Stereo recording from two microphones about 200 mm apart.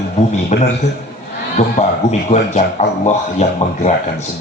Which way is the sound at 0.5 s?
35° left (ahead or behind).